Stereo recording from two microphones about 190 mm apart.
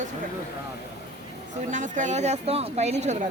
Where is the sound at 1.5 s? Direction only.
40° right (ahead or behind).